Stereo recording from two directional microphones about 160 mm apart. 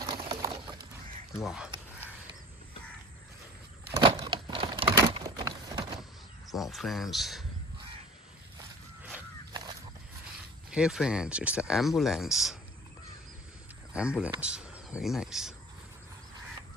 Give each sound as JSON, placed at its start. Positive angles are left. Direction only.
{"t": 0.0, "sound": "a sound", "side_deg": -30}
{"t": 1.4, "sound": "speech", "side_deg": -5}
{"t": 3.9, "sound": "crumpling", "side_deg": -25}
{"t": 5.2, "sound": "a sound", "side_deg": -25}
{"t": 6.5, "sound": "speech", "side_deg": 0}
{"t": 10.7, "sound": "speech", "side_deg": -5}
{"t": 13.9, "sound": "speech", "side_deg": -5}